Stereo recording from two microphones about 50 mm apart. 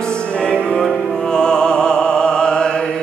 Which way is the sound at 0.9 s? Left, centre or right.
Centre.